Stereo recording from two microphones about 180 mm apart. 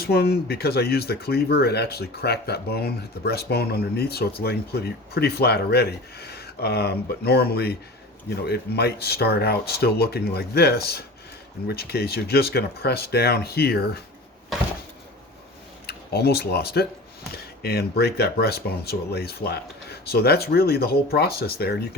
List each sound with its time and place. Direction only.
0.0 s speech: 60° left (ahead or behind)
15.9 s speech: 60° left (ahead or behind)